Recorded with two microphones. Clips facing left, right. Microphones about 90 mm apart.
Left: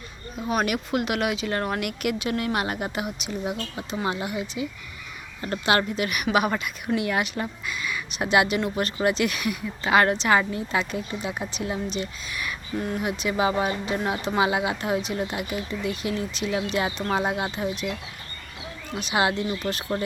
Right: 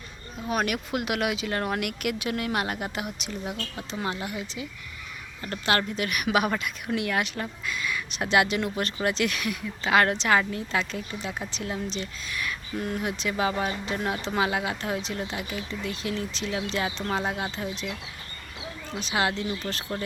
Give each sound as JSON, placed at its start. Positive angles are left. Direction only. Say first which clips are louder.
{"t": 0.3, "sound": "speech", "louder": "left 2 dB", "side_deg": 0}
{"t": 5.6, "sound": "speech", "louder": "left 3 dB", "side_deg": 10}
{"t": 16.8, "sound": "speech", "louder": "left 3 dB", "side_deg": 25}
{"t": 17.2, "sound": "speech", "louder": "left 4 dB", "side_deg": 15}
{"t": 18.9, "sound": "speech", "louder": "left 3 dB", "side_deg": 10}